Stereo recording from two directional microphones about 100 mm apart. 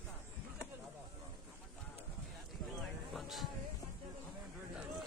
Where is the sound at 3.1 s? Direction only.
Centre (ahead or behind).